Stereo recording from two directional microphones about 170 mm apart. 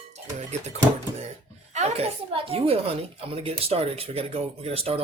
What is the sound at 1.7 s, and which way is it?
A woman's voice, 40° right (ahead or behind).